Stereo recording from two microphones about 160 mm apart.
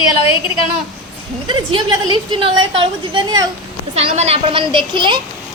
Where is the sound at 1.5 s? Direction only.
30° right (ahead or behind).